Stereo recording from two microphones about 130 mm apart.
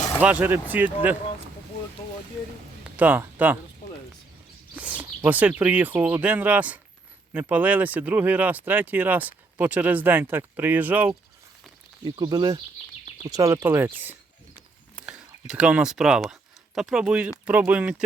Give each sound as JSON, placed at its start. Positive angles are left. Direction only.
{"t": 0.2, "sound": "speech", "side_deg": -10}
{"t": 2.9, "sound": "speech", "side_deg": -15}
{"t": 4.7, "sound": "speech", "side_deg": -10}
{"t": 12.0, "sound": "speech", "side_deg": -35}